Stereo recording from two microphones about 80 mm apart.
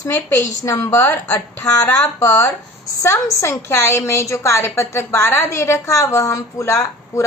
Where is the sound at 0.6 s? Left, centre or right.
Left.